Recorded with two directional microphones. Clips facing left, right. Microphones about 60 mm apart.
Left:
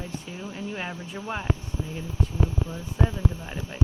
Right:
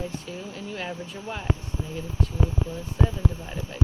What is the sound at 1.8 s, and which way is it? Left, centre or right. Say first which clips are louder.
Speech: even; right.